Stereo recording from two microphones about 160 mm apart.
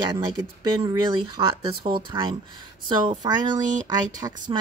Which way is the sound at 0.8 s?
30° right (ahead or behind).